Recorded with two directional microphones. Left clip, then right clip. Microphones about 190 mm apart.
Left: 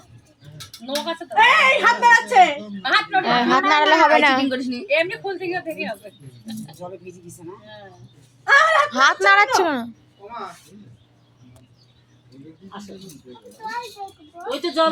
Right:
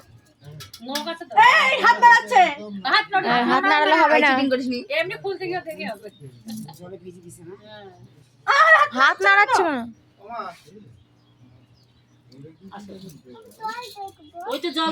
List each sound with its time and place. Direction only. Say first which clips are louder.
0.9 s speech: left 3 dB; 5° left (ahead or behind)
3.2 s speech: left 2 dB; 5° right (ahead or behind)
4.4 s a woman's voice: right 2 dB; 30° right (ahead or behind)
4.9 s speech: left 5 dB; 10° left (ahead or behind)
8.7 s speech: right 1 dB; centre (ahead or behind)
14.4 s speech: left 4 dB; 45° right (ahead or behind)